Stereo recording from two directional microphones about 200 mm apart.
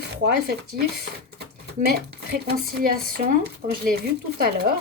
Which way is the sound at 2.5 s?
45° right (ahead or behind).